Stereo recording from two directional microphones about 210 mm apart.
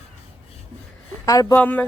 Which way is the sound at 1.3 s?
15° left (ahead or behind).